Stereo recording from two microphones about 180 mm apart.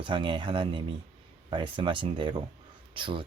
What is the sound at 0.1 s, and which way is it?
Speech, 25° right (ahead or behind).